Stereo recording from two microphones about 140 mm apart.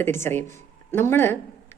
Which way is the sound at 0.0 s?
15° left (ahead or behind).